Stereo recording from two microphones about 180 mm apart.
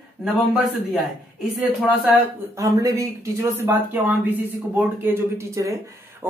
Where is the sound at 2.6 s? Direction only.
20° right (ahead or behind).